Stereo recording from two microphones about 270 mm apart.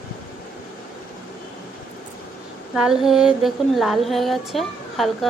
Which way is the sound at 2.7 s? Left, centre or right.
Centre.